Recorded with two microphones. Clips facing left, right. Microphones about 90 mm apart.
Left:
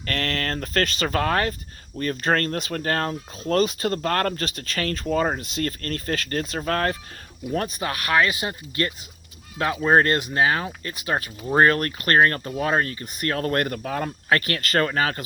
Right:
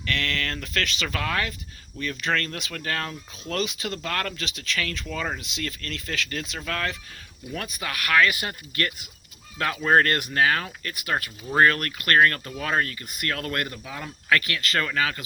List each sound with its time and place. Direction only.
0.0 s speech: 40° left (ahead or behind)
13.7 s speech: 50° left (ahead or behind)
14.3 s speech: 35° left (ahead or behind)